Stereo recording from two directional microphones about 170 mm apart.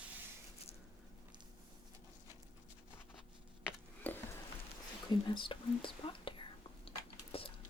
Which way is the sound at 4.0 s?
10° left (ahead or behind).